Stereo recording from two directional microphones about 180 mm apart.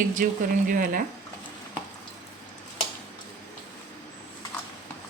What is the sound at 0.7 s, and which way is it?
Speech, 50° right (ahead or behind).